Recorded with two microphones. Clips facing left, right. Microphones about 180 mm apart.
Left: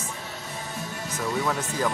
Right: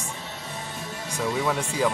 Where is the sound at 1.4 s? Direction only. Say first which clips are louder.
Right 3 dB; 5° right (ahead or behind).